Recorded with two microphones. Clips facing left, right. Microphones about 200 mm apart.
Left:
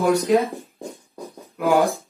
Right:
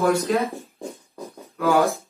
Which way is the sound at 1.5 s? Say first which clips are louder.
Left 1 dB; 15° left (ahead or behind).